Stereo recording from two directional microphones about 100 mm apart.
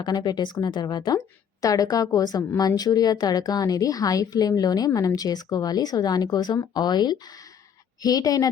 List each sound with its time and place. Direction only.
0.0 s a woman's voice: 45° left (ahead or behind)